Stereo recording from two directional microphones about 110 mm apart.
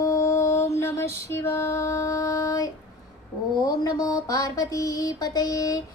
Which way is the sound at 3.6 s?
35° left (ahead or behind).